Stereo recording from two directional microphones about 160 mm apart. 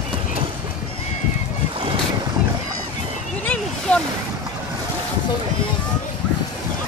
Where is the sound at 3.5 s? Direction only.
5° left (ahead or behind).